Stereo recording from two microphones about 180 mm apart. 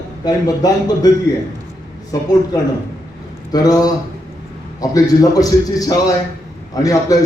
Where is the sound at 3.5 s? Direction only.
20° left (ahead or behind).